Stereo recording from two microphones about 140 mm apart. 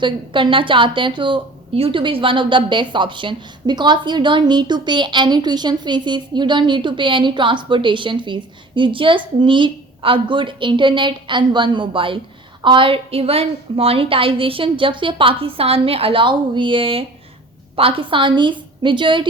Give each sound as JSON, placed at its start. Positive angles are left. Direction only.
{"t": 0.0, "sound": "a woman's voice", "side_deg": -35}